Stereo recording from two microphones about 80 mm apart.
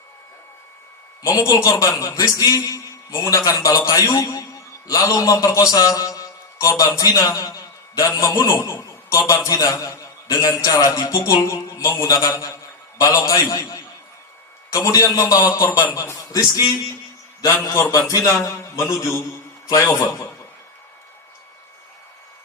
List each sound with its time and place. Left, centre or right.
1.6 s a man's voice: left